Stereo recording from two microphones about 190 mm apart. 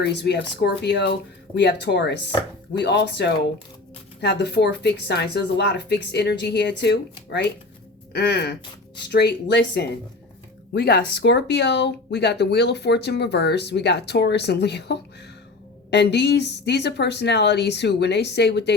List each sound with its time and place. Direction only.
0.0 s speech: 65° left (ahead or behind)